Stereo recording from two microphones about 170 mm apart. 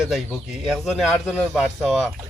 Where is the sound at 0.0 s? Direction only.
Centre (ahead or behind).